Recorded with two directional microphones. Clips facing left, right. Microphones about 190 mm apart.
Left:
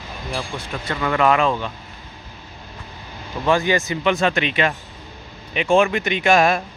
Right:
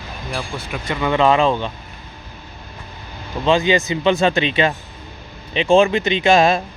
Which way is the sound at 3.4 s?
20° right (ahead or behind).